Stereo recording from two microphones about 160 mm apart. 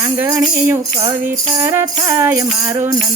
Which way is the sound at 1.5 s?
15° right (ahead or behind).